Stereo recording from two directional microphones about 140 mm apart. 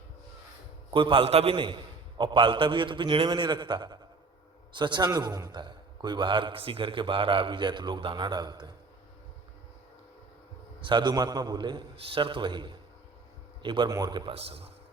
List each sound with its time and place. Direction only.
0.9 s a man's voice: 40° right (ahead or behind)
10.8 s a man's voice: 35° right (ahead or behind)